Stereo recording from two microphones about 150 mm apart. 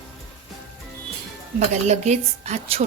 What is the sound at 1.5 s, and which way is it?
A woman's voice, 50° right (ahead or behind).